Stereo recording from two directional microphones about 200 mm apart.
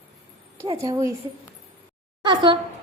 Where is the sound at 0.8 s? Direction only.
15° right (ahead or behind).